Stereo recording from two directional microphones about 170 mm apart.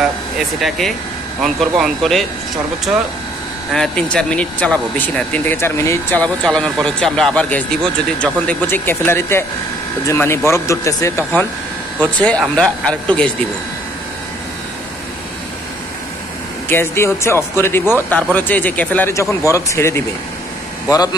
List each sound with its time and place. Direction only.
0.6 s speech: centre (ahead or behind)
3.7 s speech: 5° left (ahead or behind)
12.2 s speech: 5° left (ahead or behind)
16.6 s speech: 15° left (ahead or behind)